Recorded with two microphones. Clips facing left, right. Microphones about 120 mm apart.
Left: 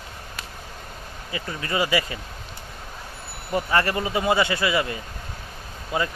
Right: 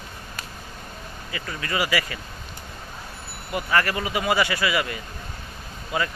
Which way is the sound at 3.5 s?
25° left (ahead or behind).